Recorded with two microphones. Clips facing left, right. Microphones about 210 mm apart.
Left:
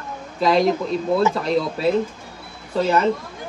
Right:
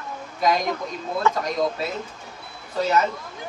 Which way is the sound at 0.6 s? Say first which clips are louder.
Left 8 dB; 30° left (ahead or behind).